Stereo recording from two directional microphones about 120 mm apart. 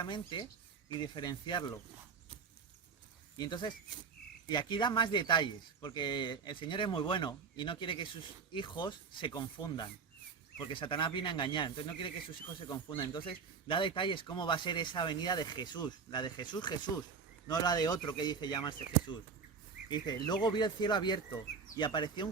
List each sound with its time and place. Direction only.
0.0 s speech: 40° left (ahead or behind)
3.3 s speech: 35° left (ahead or behind)